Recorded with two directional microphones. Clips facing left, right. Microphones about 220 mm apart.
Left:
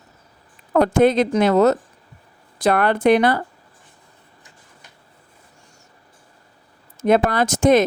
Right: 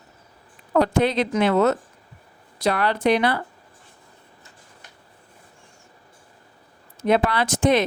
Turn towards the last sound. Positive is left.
turn(degrees=45)  # may be behind; listen again after turning